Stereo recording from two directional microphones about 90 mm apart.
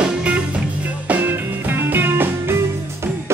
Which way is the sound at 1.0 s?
20° right (ahead or behind).